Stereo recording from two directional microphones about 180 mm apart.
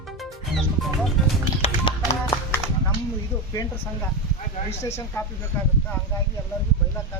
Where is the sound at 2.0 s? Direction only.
15° left (ahead or behind).